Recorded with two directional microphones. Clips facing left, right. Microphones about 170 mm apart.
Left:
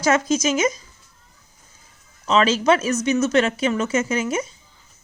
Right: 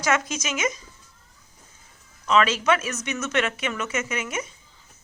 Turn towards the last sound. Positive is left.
turn(degrees=30)  # may be behind; listen again after turning